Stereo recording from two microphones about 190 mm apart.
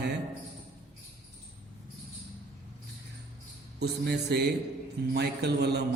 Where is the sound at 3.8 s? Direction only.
60° right (ahead or behind).